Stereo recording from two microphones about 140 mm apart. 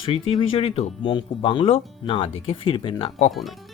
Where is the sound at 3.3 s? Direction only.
Centre (ahead or behind).